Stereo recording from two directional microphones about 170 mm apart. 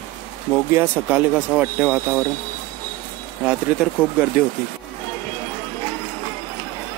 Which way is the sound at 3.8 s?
5° right (ahead or behind).